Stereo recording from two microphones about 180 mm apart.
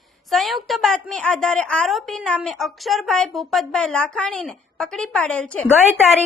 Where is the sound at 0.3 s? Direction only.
Centre (ahead or behind).